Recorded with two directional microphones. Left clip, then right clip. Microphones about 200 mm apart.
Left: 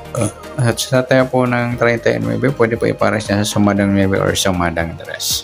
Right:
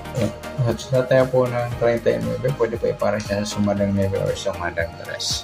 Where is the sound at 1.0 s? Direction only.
35° left (ahead or behind).